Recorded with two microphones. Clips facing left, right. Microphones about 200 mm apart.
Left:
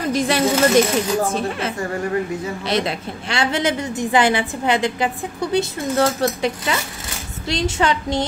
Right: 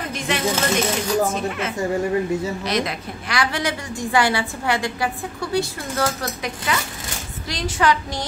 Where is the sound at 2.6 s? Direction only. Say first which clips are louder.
Left 2 dB; 30° left (ahead or behind).